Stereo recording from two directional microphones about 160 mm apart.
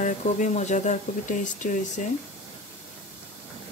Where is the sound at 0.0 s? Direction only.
50° left (ahead or behind).